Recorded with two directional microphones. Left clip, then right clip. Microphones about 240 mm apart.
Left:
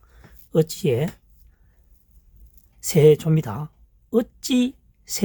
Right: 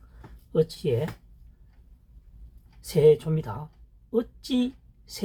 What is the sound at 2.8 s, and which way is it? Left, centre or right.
Speech, left.